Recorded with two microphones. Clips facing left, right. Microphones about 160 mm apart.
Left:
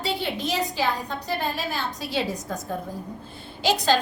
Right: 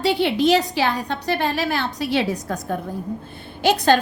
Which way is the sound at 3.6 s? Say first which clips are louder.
Right 5 dB; 55° right (ahead or behind).